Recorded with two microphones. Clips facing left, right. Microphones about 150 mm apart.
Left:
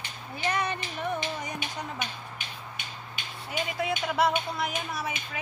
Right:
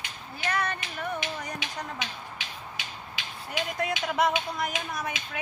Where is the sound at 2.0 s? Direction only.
90° right.